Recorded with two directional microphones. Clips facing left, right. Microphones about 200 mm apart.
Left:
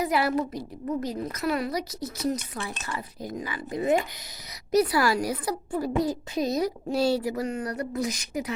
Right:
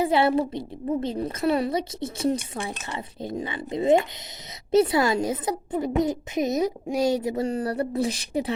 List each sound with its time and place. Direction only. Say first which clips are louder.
0.0 s a woman's voice: right 4 dB; 30° right (ahead or behind)